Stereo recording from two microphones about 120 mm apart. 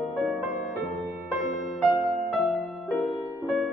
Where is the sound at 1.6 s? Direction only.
Centre (ahead or behind).